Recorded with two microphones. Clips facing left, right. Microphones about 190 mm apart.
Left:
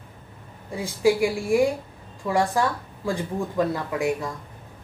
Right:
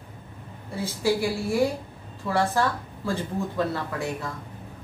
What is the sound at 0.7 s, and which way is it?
Speech, 15° left (ahead or behind).